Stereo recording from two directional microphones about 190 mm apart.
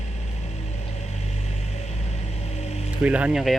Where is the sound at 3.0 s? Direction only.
5° right (ahead or behind).